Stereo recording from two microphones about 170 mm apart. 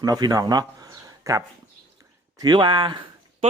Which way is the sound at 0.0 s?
20° right (ahead or behind).